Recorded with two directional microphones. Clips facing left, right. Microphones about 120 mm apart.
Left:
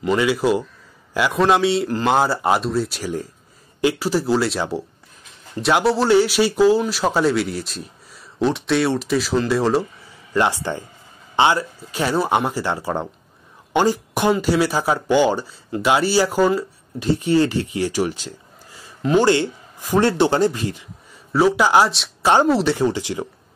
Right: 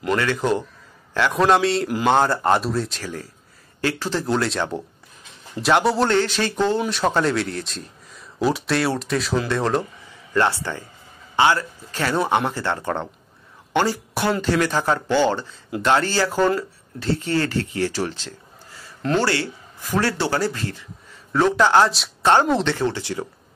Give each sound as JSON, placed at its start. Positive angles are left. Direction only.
{"t": 0.2, "sound": "speech", "side_deg": 10}
{"t": 3.0, "sound": "speech", "side_deg": 15}
{"t": 10.3, "sound": "speech", "side_deg": 15}